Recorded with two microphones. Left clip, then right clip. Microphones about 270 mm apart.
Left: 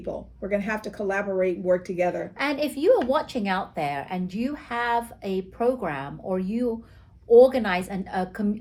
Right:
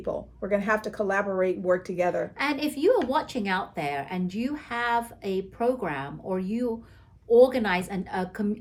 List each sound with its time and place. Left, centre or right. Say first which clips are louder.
0.0 s speech: right 1 dB; centre
2.4 s a woman's voice: left 2 dB; centre